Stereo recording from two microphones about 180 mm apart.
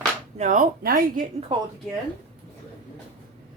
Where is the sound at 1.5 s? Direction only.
25° right (ahead or behind).